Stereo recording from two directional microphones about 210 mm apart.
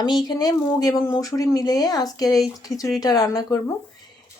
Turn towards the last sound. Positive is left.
turn(degrees=15)  # may be behind; listen again after turning